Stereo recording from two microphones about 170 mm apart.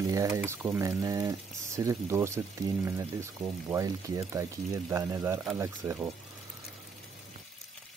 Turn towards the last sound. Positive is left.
turn(degrees=-15)  # may be behind; listen again after turning